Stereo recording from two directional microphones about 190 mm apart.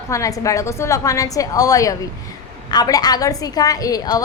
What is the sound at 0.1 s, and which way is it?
A woman's voice, 15° left (ahead or behind).